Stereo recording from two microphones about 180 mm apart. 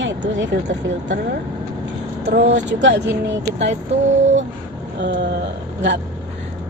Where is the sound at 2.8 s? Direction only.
75° right (ahead or behind).